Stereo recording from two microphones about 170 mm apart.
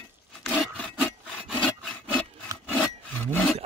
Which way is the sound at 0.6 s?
5° left (ahead or behind).